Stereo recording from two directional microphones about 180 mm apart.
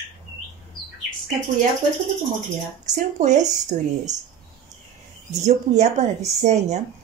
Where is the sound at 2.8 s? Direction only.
40° right (ahead or behind).